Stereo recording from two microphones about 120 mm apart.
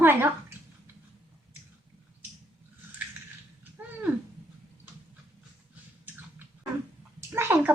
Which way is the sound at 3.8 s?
15° right (ahead or behind).